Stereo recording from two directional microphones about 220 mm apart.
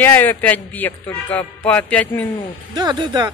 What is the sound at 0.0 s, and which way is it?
Speech, 10° left (ahead or behind).